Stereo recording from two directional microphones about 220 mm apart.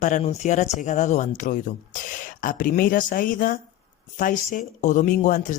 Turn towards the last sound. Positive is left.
turn(degrees=35)  # may be behind; listen again after turning